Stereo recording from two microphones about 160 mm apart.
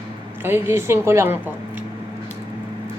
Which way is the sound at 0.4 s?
15° right (ahead or behind).